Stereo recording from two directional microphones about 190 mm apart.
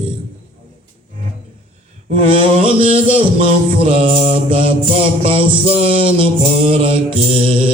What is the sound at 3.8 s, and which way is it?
Music, 30° right (ahead or behind).